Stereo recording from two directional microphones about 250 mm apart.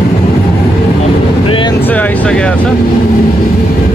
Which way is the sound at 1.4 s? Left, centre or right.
Left.